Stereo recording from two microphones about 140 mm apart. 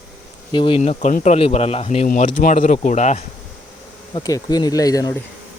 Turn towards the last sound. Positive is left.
turn(degrees=25)  # may be behind; listen again after turning